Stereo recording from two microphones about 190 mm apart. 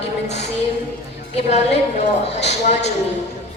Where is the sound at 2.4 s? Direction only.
35° left (ahead or behind).